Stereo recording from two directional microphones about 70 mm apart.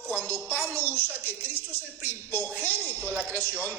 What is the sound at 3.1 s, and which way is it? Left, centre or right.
Speech, right.